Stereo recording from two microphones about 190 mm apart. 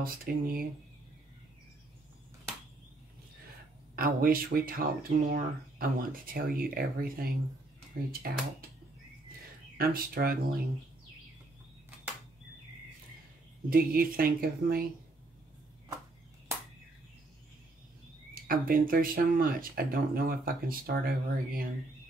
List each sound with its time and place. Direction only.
0.0 s speech: 50° right (ahead or behind)
3.9 s speech: 50° right (ahead or behind)
9.8 s speech: 50° right (ahead or behind)
13.7 s speech: 50° right (ahead or behind)
18.3 s speech: 50° right (ahead or behind)